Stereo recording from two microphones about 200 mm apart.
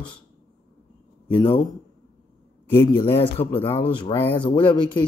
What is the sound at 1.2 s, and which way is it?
Speech, 25° left (ahead or behind).